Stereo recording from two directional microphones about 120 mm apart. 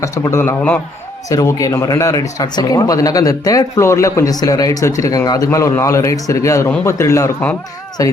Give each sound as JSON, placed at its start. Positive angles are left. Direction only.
{"t": 0.0, "sound": "speech", "side_deg": 25}